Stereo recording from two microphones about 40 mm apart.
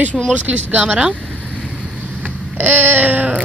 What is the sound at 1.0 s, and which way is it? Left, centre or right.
Vehicle, right.